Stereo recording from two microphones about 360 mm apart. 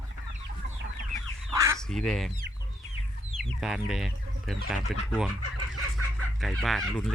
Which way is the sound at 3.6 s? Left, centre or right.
Centre.